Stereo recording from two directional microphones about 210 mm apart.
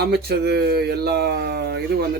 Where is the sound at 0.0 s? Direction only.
50° right (ahead or behind).